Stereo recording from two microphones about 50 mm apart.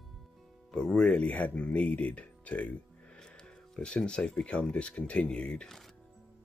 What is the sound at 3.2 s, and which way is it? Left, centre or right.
Speech, centre.